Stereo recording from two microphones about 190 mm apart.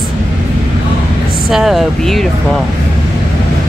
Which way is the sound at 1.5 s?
Centre (ahead or behind).